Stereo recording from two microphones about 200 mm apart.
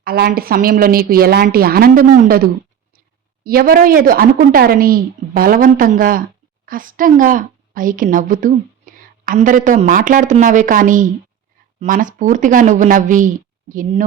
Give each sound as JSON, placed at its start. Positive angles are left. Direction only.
{"t": 0.0, "sound": "a woman's voice", "side_deg": -50}
{"t": 3.4, "sound": "a woman's voice", "side_deg": -50}